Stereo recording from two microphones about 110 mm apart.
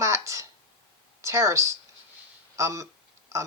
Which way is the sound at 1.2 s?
25° right (ahead or behind).